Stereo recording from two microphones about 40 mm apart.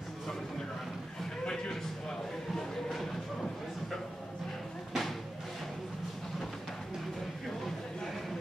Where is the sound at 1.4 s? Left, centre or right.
Centre.